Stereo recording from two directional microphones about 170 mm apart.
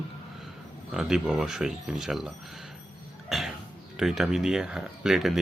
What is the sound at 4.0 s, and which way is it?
Speech, centre (ahead or behind).